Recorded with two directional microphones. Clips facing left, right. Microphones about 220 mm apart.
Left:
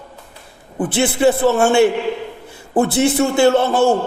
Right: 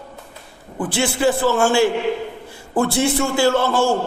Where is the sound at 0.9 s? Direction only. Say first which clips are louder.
Left 4 dB; 20° left (ahead or behind).